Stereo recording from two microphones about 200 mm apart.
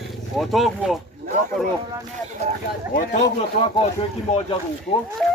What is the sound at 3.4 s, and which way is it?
Speech, 30° left (ahead or behind).